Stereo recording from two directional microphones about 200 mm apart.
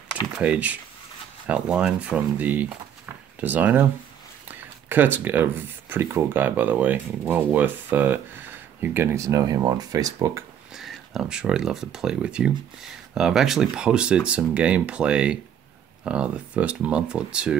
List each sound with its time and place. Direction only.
0.4 s speech: 5° right (ahead or behind)
10.7 s speech: centre (ahead or behind)